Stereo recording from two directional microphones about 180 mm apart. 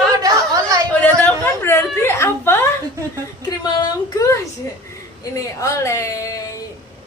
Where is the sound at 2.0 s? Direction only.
15° left (ahead or behind).